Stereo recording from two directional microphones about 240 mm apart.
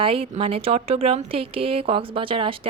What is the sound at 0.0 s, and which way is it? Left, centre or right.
Speech, right.